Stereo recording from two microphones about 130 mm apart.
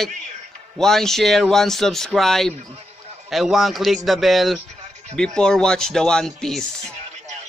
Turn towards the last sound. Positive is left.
turn(degrees=5)  # may be behind; listen again after turning